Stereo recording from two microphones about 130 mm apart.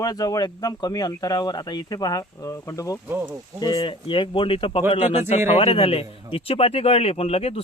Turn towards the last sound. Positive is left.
turn(degrees=50)  # may be behind; listen again after turning